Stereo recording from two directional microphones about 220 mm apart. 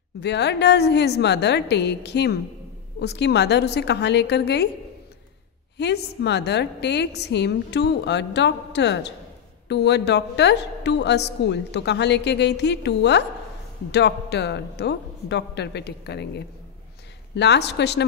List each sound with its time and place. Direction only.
0.2 s a woman's voice: 50° left (ahead or behind)
5.8 s a woman's voice: 50° left (ahead or behind)